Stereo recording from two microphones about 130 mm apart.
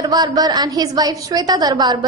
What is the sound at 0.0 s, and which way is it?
A woman's voice, 30° right (ahead or behind).